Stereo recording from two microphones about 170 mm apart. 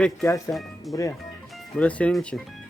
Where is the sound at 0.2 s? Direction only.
20° left (ahead or behind).